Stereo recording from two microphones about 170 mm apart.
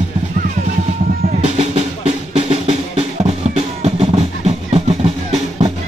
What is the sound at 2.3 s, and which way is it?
Drum, 40° right (ahead or behind).